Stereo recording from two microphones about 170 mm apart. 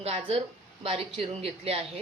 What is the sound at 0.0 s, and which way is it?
Speech, 35° right (ahead or behind).